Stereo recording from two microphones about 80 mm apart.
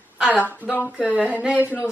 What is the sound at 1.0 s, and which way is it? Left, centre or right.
Speech, centre.